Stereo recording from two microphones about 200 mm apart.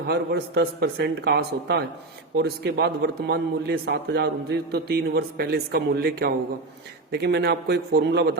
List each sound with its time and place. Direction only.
0.1 s a man's voice: 55° right (ahead or behind)